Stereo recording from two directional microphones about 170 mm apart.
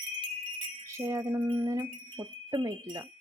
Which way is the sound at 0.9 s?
15° right (ahead or behind).